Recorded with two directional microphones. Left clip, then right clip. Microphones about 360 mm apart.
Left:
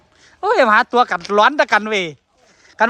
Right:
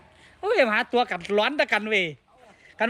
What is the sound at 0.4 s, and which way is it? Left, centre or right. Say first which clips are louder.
Speech: left 9 dB; centre.